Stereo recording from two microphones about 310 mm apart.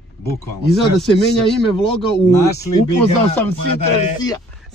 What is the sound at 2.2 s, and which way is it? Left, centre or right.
Speech, centre.